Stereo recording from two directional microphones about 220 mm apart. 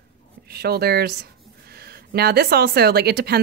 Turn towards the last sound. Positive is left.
turn(degrees=-45)  # may be behind; listen again after turning